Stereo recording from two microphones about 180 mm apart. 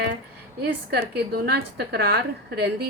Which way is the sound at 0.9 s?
60° right (ahead or behind).